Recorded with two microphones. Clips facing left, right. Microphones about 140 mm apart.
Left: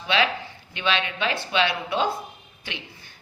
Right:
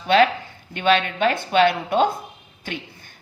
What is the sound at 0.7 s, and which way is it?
Speech, 45° right (ahead or behind).